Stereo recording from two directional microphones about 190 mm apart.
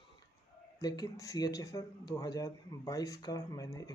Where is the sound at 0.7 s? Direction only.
20° left (ahead or behind).